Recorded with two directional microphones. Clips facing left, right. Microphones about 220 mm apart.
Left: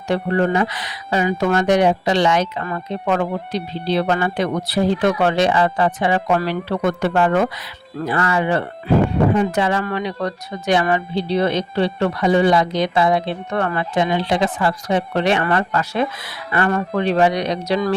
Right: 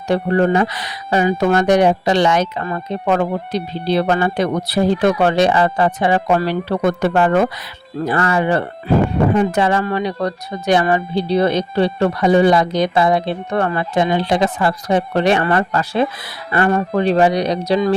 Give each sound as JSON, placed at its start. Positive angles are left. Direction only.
{"t": 0.1, "sound": "speech", "side_deg": -40}
{"t": 9.8, "sound": "speech", "side_deg": -40}